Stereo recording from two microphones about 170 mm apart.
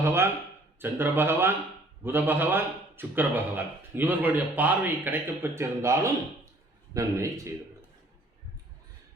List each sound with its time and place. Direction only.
0.0 s a man's voice: 15° right (ahead or behind)